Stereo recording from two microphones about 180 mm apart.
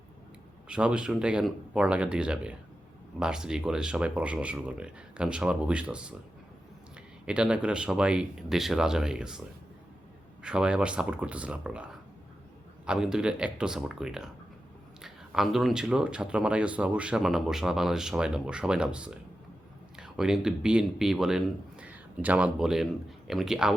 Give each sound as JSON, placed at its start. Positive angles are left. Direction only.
{"t": 0.7, "sound": "speech", "side_deg": -5}
{"t": 7.3, "sound": "speech", "side_deg": -5}
{"t": 10.4, "sound": "speech", "side_deg": -5}